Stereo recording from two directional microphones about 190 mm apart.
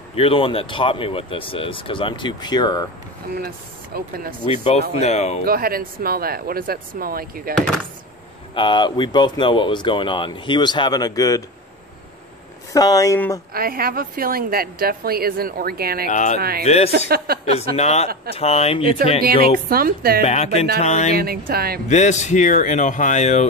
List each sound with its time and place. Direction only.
0.1 s speech: 30° left (ahead or behind)
3.3 s speech: 50° right (ahead or behind)
4.5 s speech: 35° left (ahead or behind)
5.4 s speech: 50° right (ahead or behind)
8.5 s speech: 25° left (ahead or behind)
12.7 s speech: 20° left (ahead or behind)
13.5 s speech: 50° right (ahead or behind)
16.1 s speech: 40° left (ahead or behind)
16.3 s speech: 55° right (ahead or behind)
16.6 s speech: 35° left (ahead or behind)
19.7 s speech: 50° right (ahead or behind)
20.2 s speech: 35° left (ahead or behind)
21.1 s speech: 50° right (ahead or behind)
21.8 s speech: 40° left (ahead or behind)